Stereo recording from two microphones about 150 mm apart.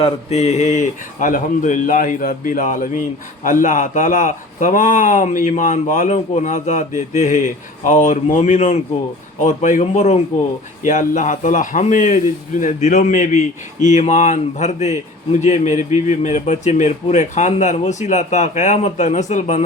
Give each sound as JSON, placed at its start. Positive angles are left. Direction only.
{"t": 0.0, "sound": "a man's voice", "side_deg": 45}